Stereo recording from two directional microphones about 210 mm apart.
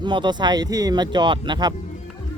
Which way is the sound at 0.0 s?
20° right (ahead or behind).